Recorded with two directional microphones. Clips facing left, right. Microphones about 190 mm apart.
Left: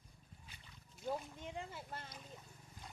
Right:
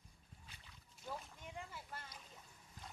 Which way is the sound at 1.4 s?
25° left (ahead or behind).